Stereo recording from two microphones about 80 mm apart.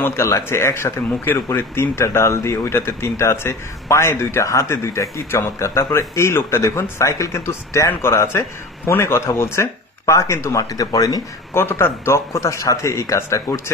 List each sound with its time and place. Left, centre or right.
0.0 s speech: left
11.5 s speech: left